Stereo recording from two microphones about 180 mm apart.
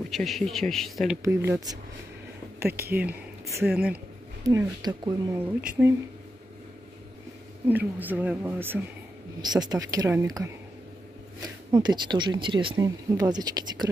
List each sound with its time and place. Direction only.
0.1 s speech: centre (ahead or behind)
1.2 s speech: 15° right (ahead or behind)
4.4 s speech: 20° right (ahead or behind)
5.6 s speech: 10° right (ahead or behind)
7.6 s speech: 10° right (ahead or behind)
9.4 s speech: 20° right (ahead or behind)